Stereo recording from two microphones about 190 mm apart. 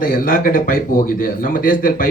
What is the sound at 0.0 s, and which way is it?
A man's voice, 45° left (ahead or behind).